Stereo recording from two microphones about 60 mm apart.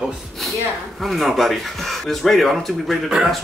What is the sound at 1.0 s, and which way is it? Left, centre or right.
Speech, centre.